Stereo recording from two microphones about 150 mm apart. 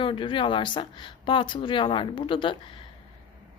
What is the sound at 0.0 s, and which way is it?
Speech, 35° left (ahead or behind).